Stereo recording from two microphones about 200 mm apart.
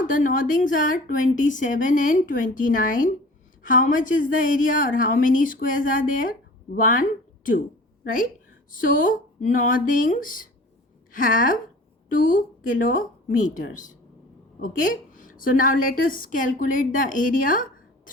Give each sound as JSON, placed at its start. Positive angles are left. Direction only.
{"t": 0.0, "sound": "a woman's voice", "side_deg": 40}